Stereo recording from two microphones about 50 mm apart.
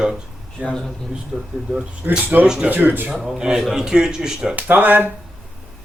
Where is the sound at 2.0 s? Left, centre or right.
Right.